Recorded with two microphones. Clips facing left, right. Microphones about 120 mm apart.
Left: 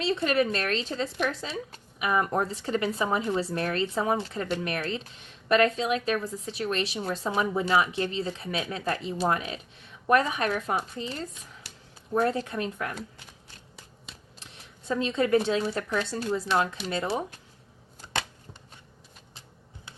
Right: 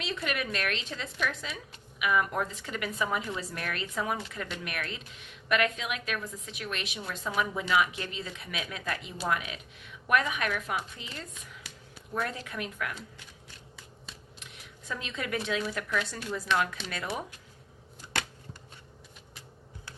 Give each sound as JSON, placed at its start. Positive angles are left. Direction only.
{"t": 0.0, "sound": "speech", "side_deg": 35}
{"t": 14.3, "sound": "speech", "side_deg": 30}